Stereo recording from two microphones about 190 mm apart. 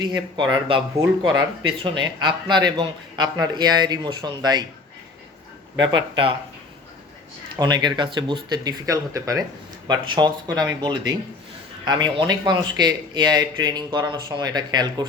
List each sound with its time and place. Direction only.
0.0 s speech: 20° right (ahead or behind)
5.8 s speech: 25° right (ahead or behind)
7.6 s speech: 20° right (ahead or behind)